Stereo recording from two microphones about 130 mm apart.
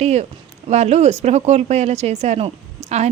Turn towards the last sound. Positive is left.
turn(degrees=-55)  # may be behind; listen again after turning